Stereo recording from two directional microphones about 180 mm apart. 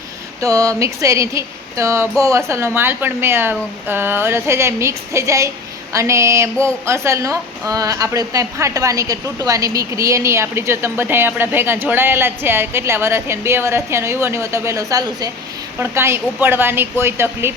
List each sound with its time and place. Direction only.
0.4 s a woman's voice: 20° right (ahead or behind)